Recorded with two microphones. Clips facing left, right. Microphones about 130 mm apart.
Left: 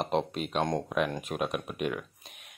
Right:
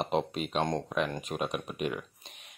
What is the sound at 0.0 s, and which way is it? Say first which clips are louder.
Speech: left 1 dB; centre (ahead or behind).